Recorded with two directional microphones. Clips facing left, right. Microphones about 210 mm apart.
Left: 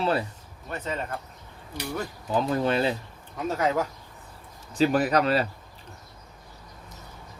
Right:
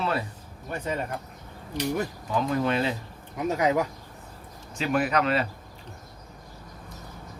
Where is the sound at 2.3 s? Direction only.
35° left (ahead or behind).